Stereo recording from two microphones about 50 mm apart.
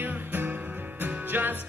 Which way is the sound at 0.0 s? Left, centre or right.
Right.